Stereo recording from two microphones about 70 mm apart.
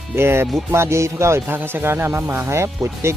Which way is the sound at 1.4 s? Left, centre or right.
Right.